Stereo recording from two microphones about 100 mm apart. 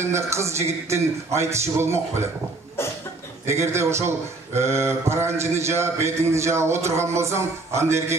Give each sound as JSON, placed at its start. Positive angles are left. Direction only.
{"t": 0.0, "sound": "a man's voice", "side_deg": -25}
{"t": 3.4, "sound": "a man's voice", "side_deg": -25}